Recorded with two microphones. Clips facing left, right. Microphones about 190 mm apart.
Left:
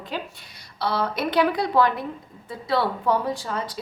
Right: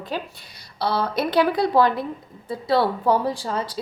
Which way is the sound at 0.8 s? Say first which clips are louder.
Right 2 dB; 35° right (ahead or behind).